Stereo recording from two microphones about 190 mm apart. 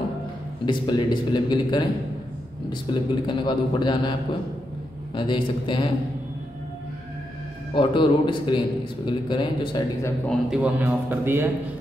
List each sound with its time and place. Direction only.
0.7 s a man's voice: 25° left (ahead or behind)
2.9 s a man's voice: 25° left (ahead or behind)
5.1 s a man's voice: 25° left (ahead or behind)
7.7 s a man's voice: 25° left (ahead or behind)
10.2 s a man's voice: 5° right (ahead or behind)